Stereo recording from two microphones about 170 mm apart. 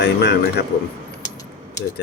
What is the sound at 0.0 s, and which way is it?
Speech, 80° left.